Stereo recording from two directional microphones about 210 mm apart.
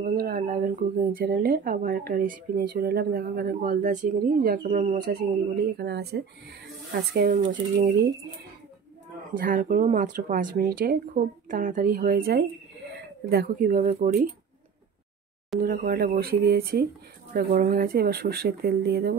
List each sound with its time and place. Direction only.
0.0 s speech: 45° right (ahead or behind)
9.3 s speech: 40° right (ahead or behind)
15.6 s speech: 40° right (ahead or behind)